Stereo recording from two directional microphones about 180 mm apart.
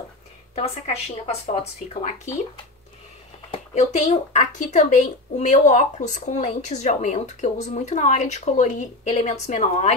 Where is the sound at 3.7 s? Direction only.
40° left (ahead or behind).